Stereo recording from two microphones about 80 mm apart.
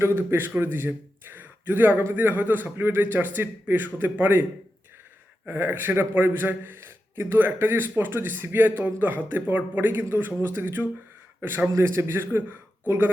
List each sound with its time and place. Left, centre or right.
0.0 s a man's voice: right
5.5 s a man's voice: right